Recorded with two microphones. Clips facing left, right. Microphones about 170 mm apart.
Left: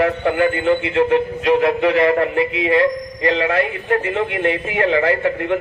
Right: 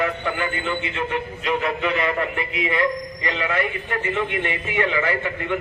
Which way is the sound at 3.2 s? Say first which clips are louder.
Left 8 dB; 55° left (ahead or behind).